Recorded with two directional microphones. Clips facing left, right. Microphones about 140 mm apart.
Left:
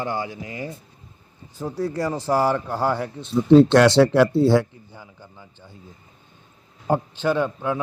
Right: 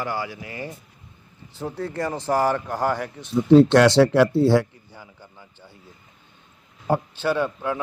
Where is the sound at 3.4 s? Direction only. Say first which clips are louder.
Left 1 dB; 25° left (ahead or behind).